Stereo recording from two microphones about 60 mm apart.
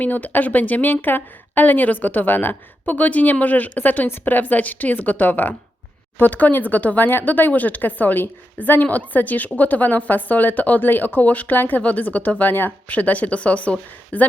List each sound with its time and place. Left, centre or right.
0.0 s speech: left